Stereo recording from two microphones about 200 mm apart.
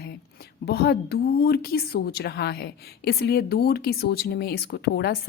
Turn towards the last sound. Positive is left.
turn(degrees=55)  # may be behind; listen again after turning